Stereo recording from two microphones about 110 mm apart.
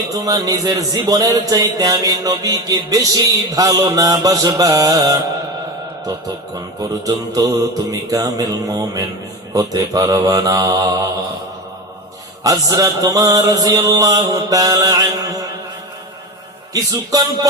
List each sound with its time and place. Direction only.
0.1 s speech: 35° right (ahead or behind)
6.8 s speech: 35° right (ahead or behind)
12.4 s speech: 35° right (ahead or behind)
16.7 s speech: 35° right (ahead or behind)